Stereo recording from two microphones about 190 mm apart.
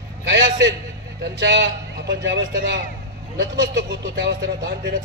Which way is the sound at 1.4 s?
65° right (ahead or behind).